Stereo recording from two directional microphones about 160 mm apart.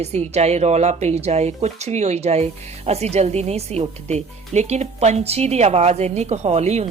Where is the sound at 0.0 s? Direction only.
40° right (ahead or behind).